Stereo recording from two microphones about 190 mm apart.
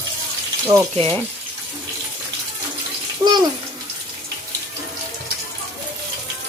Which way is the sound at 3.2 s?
20° right (ahead or behind).